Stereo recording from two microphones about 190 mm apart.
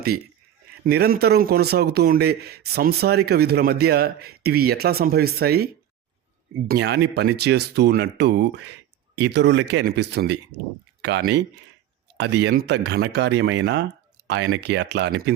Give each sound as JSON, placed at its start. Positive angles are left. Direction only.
{"t": 0.9, "sound": "speech", "side_deg": -55}